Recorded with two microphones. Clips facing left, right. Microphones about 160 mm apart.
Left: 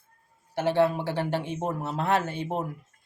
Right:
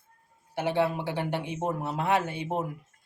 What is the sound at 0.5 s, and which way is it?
Speech, 15° right (ahead or behind).